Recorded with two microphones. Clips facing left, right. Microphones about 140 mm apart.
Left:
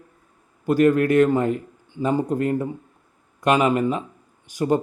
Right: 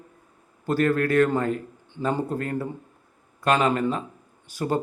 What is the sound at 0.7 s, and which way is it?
Speech, 15° left (ahead or behind).